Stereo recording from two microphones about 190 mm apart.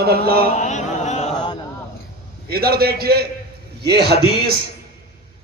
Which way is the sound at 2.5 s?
55° right (ahead or behind).